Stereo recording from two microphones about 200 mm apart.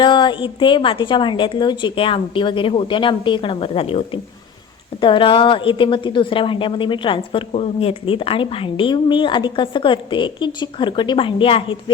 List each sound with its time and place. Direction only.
0.0 s a woman's voice: 20° left (ahead or behind)